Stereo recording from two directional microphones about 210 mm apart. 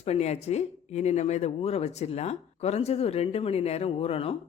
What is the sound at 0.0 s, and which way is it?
Speech, 30° left (ahead or behind).